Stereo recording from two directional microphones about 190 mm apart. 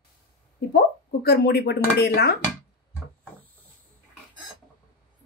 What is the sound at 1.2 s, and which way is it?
Speech, 55° left (ahead or behind).